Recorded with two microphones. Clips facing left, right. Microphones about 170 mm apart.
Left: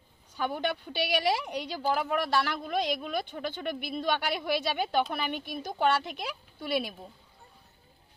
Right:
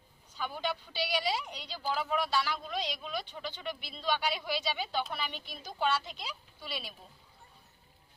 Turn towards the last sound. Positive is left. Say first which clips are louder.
# left 12 dB
turn(degrees=55)  # may be behind; listen again after turning